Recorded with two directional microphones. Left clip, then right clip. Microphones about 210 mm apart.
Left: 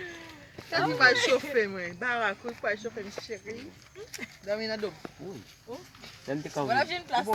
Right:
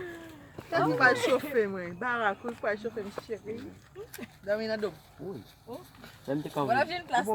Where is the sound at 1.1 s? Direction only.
50° right (ahead or behind).